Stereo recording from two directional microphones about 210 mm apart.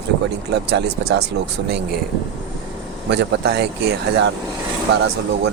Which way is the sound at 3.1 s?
55° right (ahead or behind).